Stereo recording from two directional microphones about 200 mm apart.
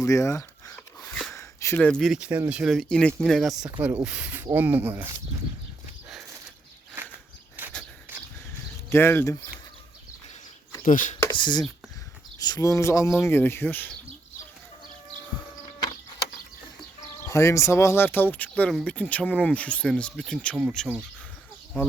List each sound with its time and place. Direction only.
0.0 s a sound: 15° left (ahead or behind)
1.3 s speech: 15° left (ahead or behind); by 5.1 s 10° right (ahead or behind)
7.6 s a sound: 10° right (ahead or behind)
8.9 s speech: 10° left (ahead or behind)
10.8 s speech: 40° left (ahead or behind)
11.3 s speech: 20° left (ahead or behind)
17.2 s speech: 15° left (ahead or behind); by 21.0 s centre (ahead or behind)